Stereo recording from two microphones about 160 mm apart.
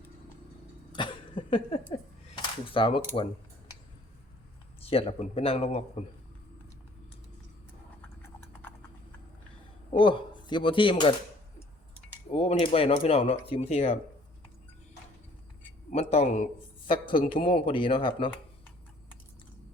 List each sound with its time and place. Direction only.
0.9 s a sound: 30° left (ahead or behind)
4.8 s speech: 35° left (ahead or behind)
10.0 s speech: 30° left (ahead or behind)
12.3 s speech: 35° left (ahead or behind)
15.9 s a man's voice: 40° left (ahead or behind)
16.9 s speech: 30° left (ahead or behind)